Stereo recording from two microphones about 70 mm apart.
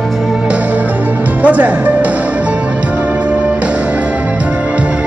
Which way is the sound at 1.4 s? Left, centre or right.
Right.